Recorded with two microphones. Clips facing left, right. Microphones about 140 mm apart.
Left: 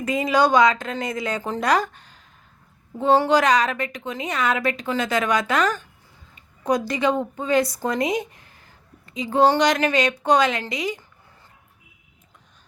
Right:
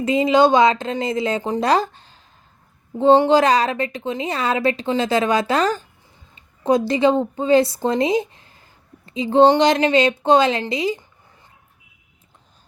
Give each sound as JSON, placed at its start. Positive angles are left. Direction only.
{"t": 0.0, "sound": "speech", "side_deg": -25}